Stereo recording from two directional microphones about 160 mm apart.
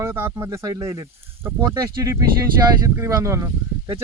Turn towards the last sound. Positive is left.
turn(degrees=-20)  # may be behind; listen again after turning